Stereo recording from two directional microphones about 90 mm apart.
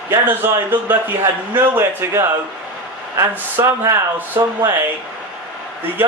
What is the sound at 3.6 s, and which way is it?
Speech, 30° right (ahead or behind).